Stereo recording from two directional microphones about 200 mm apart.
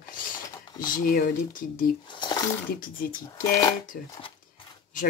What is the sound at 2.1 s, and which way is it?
Speech, 25° left (ahead or behind).